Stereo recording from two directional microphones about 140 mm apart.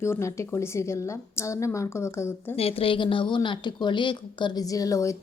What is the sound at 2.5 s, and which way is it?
Speech, 45° left (ahead or behind).